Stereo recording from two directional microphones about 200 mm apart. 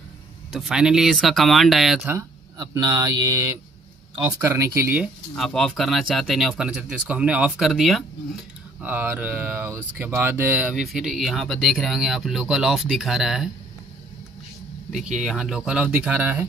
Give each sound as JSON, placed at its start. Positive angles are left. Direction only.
{"t": 0.5, "sound": "speech", "side_deg": 0}
{"t": 2.1, "sound": "speech", "side_deg": -15}
{"t": 5.3, "sound": "speech", "side_deg": 0}
{"t": 14.9, "sound": "speech", "side_deg": 0}